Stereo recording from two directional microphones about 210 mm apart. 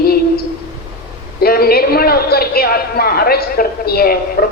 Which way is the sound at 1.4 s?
45° left (ahead or behind).